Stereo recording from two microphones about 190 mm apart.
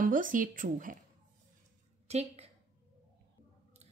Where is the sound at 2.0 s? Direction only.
35° right (ahead or behind).